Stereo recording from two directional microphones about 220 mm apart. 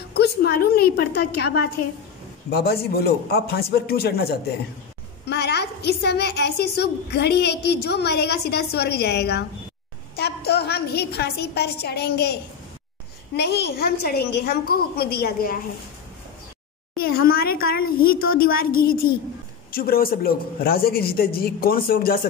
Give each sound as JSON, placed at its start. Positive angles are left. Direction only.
{"t": 0.1, "sound": "a woman's voice", "side_deg": 45}
{"t": 13.4, "sound": "a woman's voice", "side_deg": 50}
{"t": 16.9, "sound": "a woman's voice", "side_deg": 45}